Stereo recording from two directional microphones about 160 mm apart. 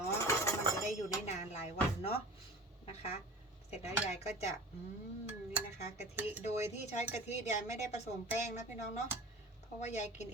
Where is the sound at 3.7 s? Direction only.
40° left (ahead or behind).